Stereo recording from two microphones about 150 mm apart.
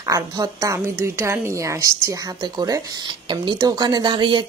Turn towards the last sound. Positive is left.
turn(degrees=-30)  # may be behind; listen again after turning